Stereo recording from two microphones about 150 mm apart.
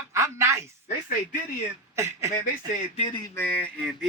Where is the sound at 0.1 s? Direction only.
20° right (ahead or behind).